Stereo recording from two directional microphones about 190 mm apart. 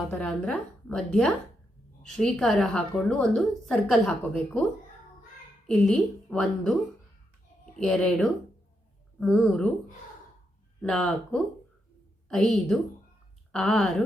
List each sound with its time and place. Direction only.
0.1 s a woman's voice: 5° left (ahead or behind)
5.6 s a woman's voice: 5° left (ahead or behind)
7.8 s a woman's voice: 5° left (ahead or behind)
10.8 s a woman's voice: 5° left (ahead or behind)